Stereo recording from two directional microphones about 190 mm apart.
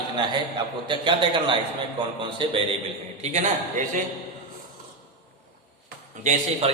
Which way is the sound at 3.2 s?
40° right (ahead or behind).